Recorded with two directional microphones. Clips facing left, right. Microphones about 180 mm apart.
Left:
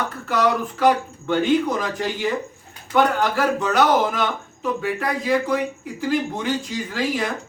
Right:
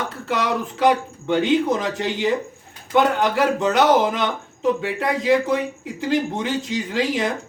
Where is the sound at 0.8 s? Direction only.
20° right (ahead or behind).